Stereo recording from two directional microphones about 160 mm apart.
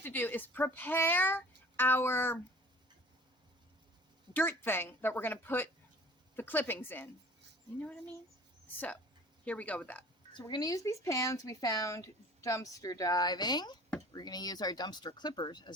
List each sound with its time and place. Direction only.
0.0 s speech: 10° left (ahead or behind)
4.4 s speech: 15° left (ahead or behind)
9.4 s speech: 10° left (ahead or behind)
10.3 s speech: 25° left (ahead or behind)